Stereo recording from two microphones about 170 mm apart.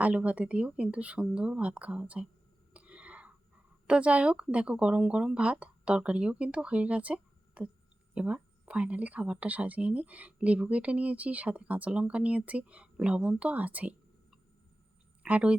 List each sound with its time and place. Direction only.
0.0 s speech: 10° right (ahead or behind)
2.7 s a sound: 5° right (ahead or behind)
3.8 s a woman's voice: 5° right (ahead or behind)